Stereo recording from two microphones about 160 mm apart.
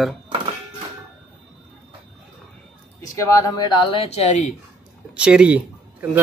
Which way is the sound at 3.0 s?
20° left (ahead or behind).